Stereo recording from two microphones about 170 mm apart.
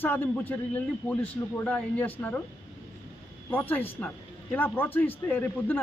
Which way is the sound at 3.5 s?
10° left (ahead or behind).